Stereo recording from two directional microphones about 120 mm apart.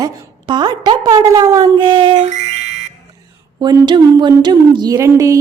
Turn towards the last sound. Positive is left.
turn(degrees=-25)  # may be behind; listen again after turning